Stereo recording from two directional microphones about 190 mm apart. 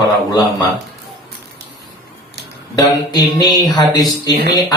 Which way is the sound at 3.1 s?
20° left (ahead or behind).